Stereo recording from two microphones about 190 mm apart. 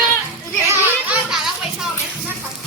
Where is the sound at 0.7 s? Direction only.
5° right (ahead or behind).